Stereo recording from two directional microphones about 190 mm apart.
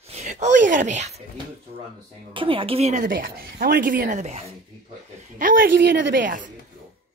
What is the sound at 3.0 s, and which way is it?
Speech, 50° right (ahead or behind).